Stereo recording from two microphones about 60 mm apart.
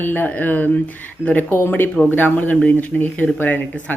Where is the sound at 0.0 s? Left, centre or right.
Left.